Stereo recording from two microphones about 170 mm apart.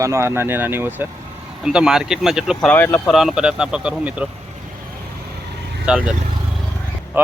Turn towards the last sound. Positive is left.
turn(degrees=-10)  # may be behind; listen again after turning